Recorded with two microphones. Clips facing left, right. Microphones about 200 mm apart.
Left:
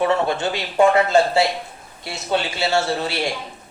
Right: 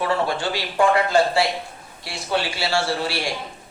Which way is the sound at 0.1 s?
20° left (ahead or behind).